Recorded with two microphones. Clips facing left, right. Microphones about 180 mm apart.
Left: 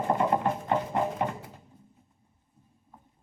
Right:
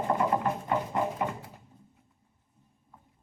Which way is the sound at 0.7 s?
35° left (ahead or behind).